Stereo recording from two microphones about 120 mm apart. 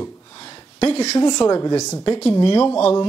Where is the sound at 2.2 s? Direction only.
50° left (ahead or behind).